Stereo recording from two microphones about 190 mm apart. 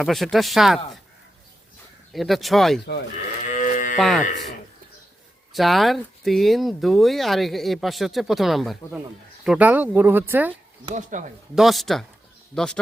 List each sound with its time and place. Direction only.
0.0 s speech: centre (ahead or behind)
2.1 s speech: centre (ahead or behind)
3.4 s livestock: 40° left (ahead or behind)
3.9 s speech: centre (ahead or behind)
5.5 s speech: centre (ahead or behind)
10.9 s speech: 40° right (ahead or behind)
11.5 s speech: centre (ahead or behind)